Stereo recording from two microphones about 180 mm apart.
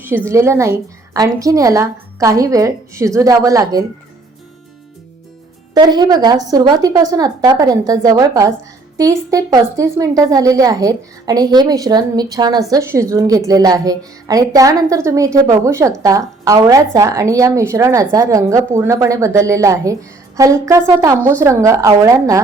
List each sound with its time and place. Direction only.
0.3 s a woman's voice: 15° right (ahead or behind)
5.7 s a woman's voice: 25° right (ahead or behind)